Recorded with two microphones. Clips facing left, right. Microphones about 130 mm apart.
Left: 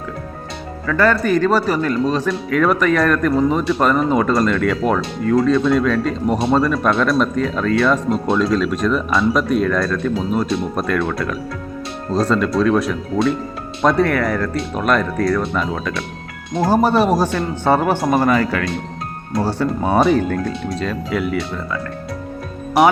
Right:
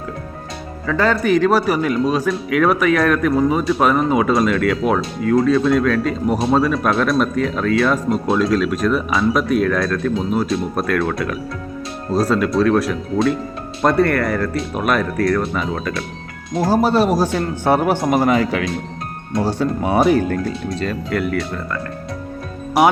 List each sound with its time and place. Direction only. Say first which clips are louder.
0.9 s speech: even; 15° right (ahead or behind)
20.7 s speech: even; centre (ahead or behind)